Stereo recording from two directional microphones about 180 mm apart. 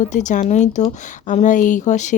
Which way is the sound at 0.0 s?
40° left (ahead or behind).